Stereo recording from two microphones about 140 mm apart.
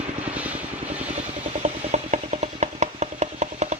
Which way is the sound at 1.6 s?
55° right (ahead or behind).